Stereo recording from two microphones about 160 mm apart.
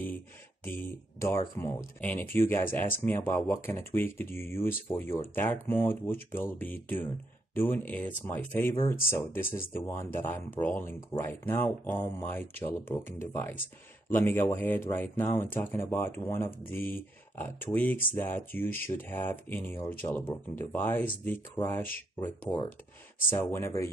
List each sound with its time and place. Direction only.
0.7 s speech: 15° left (ahead or behind)